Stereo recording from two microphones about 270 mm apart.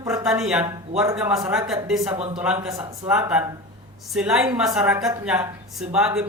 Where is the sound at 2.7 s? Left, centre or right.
Centre.